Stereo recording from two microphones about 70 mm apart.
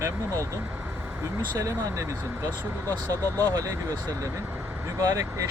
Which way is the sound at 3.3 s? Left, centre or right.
Right.